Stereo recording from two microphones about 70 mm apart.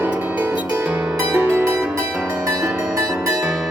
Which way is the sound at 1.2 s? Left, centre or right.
Right.